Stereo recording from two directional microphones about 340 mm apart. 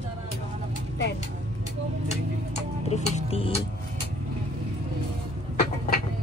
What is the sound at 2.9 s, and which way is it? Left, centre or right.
Speech, centre.